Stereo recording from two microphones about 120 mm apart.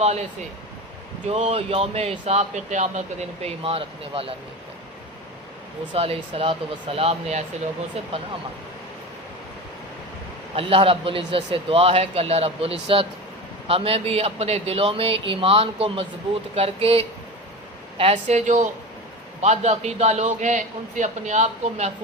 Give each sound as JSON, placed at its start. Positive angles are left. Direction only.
{"t": 1.3, "sound": "speech", "side_deg": -60}
{"t": 3.6, "sound": "a man's voice", "side_deg": -50}
{"t": 5.9, "sound": "a man's voice", "side_deg": -55}
{"t": 10.5, "sound": "a man's voice", "side_deg": -50}
{"t": 18.3, "sound": "speech", "side_deg": -75}
{"t": 19.4, "sound": "a man's voice", "side_deg": -65}